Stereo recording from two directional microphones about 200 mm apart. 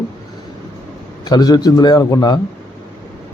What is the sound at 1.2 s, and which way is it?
Speech, 20° left (ahead or behind).